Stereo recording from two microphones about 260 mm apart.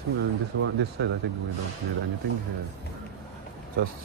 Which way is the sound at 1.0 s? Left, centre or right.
Right.